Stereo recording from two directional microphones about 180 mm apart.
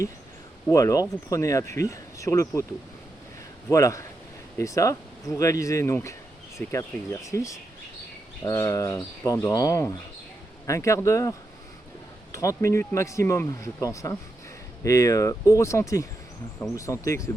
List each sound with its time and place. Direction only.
0.7 s speech: 20° left (ahead or behind)
3.7 s speech: 15° left (ahead or behind)